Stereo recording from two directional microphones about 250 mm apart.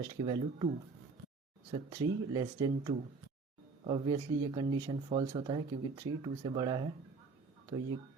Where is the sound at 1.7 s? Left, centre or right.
Centre.